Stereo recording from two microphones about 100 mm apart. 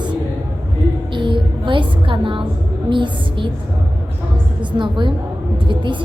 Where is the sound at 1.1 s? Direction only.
55° right (ahead or behind).